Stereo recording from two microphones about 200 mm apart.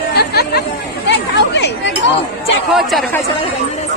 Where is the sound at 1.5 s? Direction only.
60° left (ahead or behind).